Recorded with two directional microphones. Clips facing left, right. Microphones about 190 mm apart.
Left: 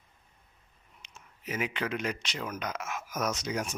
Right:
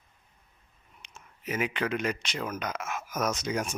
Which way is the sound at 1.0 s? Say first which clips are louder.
Right 3 dB; 55° right (ahead or behind).